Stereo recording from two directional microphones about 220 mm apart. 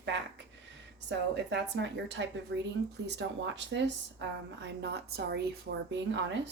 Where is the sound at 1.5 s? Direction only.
55° right (ahead or behind).